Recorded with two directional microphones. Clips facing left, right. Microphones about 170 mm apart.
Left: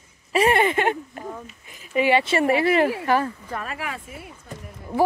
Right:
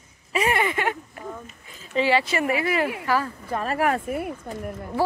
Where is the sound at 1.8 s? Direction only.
15° left (ahead or behind).